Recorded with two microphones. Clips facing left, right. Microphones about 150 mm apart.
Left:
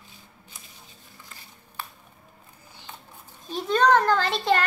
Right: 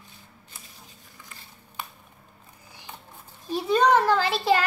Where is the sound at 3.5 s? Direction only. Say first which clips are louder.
Even; 10° right (ahead or behind).